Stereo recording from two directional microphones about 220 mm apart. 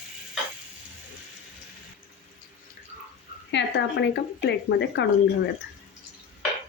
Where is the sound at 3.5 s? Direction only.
55° left (ahead or behind).